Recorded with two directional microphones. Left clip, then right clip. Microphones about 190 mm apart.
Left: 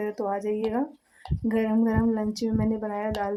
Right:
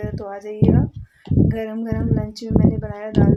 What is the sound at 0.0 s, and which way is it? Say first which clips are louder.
Speech: left 2 dB; 15° left (ahead or behind).